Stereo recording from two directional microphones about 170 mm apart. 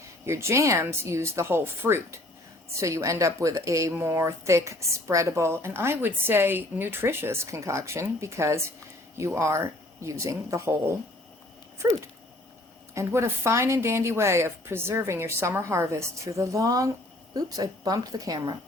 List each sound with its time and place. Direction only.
0.3 s speech: 15° right (ahead or behind)
12.9 s a woman's voice: 15° right (ahead or behind)